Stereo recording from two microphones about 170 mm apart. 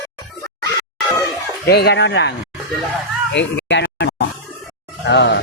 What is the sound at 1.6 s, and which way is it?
Speech, 75° left (ahead or behind).